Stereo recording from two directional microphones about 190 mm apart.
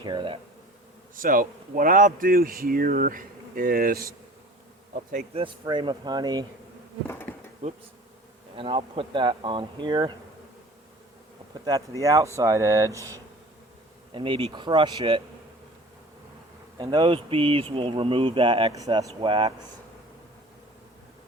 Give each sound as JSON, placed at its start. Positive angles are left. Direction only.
{"t": 0.0, "sound": "speech", "side_deg": -25}
{"t": 1.1, "sound": "speech", "side_deg": -45}
{"t": 5.1, "sound": "speech", "side_deg": -30}
{"t": 7.1, "sound": "bee", "side_deg": 10}
{"t": 7.6, "sound": "bee", "side_deg": -30}
{"t": 8.5, "sound": "speech", "side_deg": -30}
{"t": 11.5, "sound": "speech", "side_deg": -20}
{"t": 14.1, "sound": "speech", "side_deg": -25}
{"t": 16.7, "sound": "speech", "side_deg": -25}